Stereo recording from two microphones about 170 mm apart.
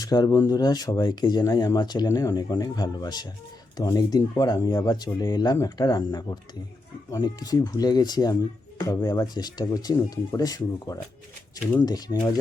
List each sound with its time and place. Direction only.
0.0 s speech: 20° left (ahead or behind)